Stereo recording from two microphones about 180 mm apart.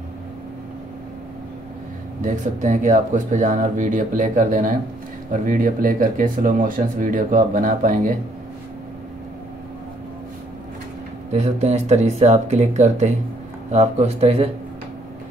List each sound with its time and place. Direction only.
2.2 s speech: 45° right (ahead or behind)
11.3 s speech: 40° right (ahead or behind)